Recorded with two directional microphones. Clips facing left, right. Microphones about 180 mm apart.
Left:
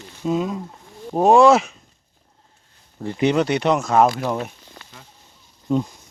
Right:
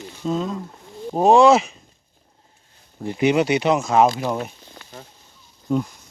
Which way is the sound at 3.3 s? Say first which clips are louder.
Right 1 dB; 5° right (ahead or behind).